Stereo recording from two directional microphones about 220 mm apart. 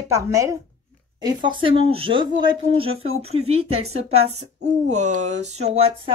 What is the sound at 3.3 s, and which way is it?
Speech, 25° right (ahead or behind).